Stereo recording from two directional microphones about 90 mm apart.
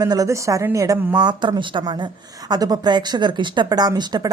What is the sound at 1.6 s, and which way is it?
A woman's voice, 65° right (ahead or behind).